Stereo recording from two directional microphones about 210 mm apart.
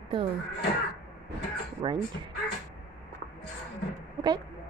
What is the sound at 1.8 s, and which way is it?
Speech, 20° right (ahead or behind).